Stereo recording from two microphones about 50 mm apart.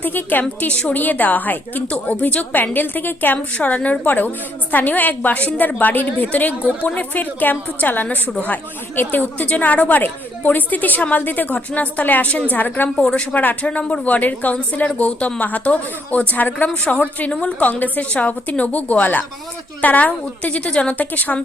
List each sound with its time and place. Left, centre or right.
0.0 s a woman's voice: left
13.0 s speech: centre
13.3 s a woman's voice: left
13.7 s a woman's voice: left